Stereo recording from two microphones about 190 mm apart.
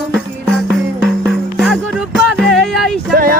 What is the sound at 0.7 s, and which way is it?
Music, centre (ahead or behind).